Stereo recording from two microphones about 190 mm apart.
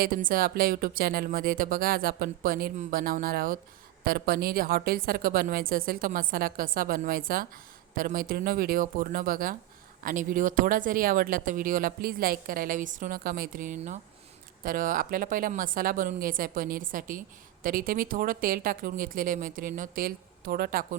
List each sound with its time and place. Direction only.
0.0 s speech: 45° right (ahead or behind)